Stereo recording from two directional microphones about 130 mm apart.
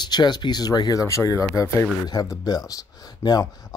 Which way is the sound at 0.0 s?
35° left (ahead or behind).